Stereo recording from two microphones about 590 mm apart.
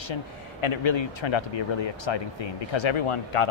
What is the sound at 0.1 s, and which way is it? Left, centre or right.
Speech, left.